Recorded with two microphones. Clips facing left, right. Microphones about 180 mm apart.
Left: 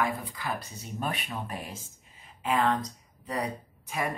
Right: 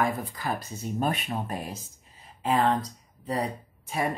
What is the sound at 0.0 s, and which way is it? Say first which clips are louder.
Speech: right 3 dB; 45° right (ahead or behind).